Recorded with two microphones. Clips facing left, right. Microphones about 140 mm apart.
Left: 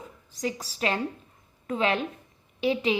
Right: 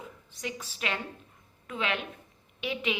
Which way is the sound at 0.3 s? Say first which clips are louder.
Left 7 dB; 35° left (ahead or behind).